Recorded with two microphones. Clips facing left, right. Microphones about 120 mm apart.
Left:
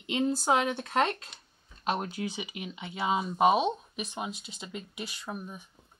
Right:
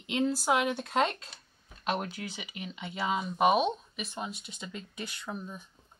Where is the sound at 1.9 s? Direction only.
35° left (ahead or behind).